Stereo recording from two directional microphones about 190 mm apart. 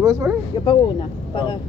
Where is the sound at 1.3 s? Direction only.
25° left (ahead or behind).